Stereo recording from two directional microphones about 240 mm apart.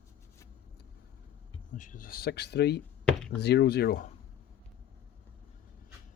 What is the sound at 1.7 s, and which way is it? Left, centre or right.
Speech, left.